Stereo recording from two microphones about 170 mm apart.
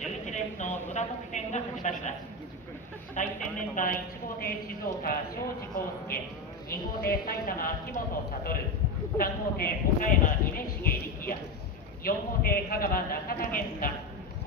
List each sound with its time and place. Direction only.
0.0 s a woman's voice: 45° left (ahead or behind)
3.2 s speech: 45° left (ahead or behind)
6.7 s speech: 60° left (ahead or behind)
9.2 s speech: 55° left (ahead or behind)